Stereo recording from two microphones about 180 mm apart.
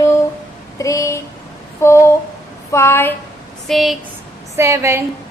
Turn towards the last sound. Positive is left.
turn(degrees=-15)  # may be behind; listen again after turning